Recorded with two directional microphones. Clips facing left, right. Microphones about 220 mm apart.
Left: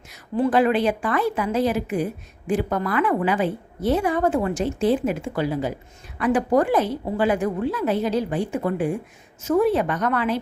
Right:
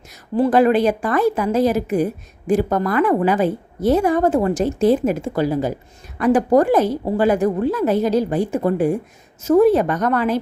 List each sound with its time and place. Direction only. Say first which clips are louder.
0.1 s a woman's voice: right 4 dB; 40° right (ahead or behind)